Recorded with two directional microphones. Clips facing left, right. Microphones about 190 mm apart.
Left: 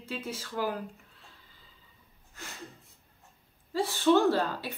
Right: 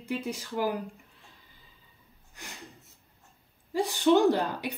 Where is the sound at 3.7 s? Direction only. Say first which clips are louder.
Right 1 dB; 15° right (ahead or behind).